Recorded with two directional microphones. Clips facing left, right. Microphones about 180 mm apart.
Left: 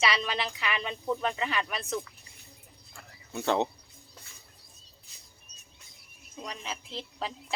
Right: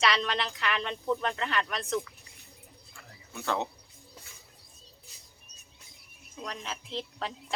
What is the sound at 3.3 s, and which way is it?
Speech, 25° left (ahead or behind).